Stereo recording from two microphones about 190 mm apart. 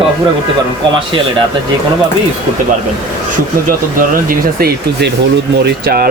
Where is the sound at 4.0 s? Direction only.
50° right (ahead or behind).